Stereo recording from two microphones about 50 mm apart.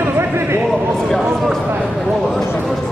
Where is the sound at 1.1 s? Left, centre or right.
Centre.